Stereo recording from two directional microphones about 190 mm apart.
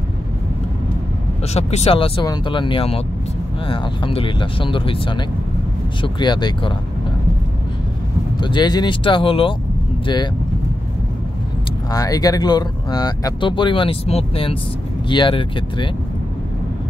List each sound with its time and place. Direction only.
1.5 s speech: 35° left (ahead or behind)
8.4 s speech: 25° left (ahead or behind)
11.9 s speech: 20° left (ahead or behind)